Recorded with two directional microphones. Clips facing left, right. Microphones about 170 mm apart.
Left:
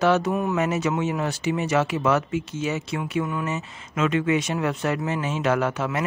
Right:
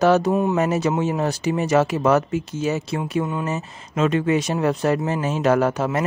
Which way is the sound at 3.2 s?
25° right (ahead or behind).